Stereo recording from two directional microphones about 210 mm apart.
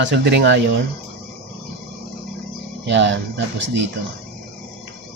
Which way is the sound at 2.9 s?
60° right (ahead or behind).